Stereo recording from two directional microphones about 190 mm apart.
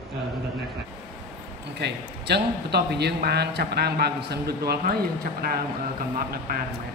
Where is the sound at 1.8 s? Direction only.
60° right (ahead or behind).